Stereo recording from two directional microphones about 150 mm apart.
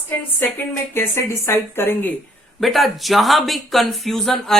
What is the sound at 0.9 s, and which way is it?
Speech, 15° left (ahead or behind).